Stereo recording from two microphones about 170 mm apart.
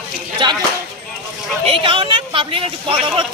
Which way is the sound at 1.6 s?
30° right (ahead or behind).